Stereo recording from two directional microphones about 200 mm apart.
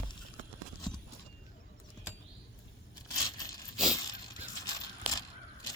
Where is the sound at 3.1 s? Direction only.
20° left (ahead or behind).